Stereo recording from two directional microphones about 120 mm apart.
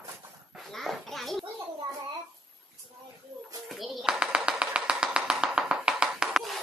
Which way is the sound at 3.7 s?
Centre (ahead or behind).